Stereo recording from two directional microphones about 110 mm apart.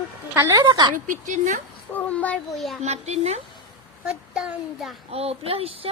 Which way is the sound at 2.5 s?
Centre (ahead or behind).